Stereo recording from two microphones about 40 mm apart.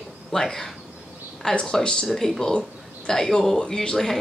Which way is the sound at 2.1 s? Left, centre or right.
Centre.